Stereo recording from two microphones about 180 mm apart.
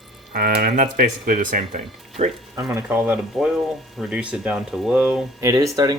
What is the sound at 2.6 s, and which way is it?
Speech, 15° right (ahead or behind).